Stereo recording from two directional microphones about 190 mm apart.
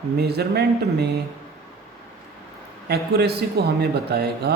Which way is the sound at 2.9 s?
55° right (ahead or behind).